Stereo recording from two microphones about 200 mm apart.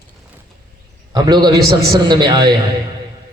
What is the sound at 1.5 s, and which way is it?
Speech, 50° right (ahead or behind).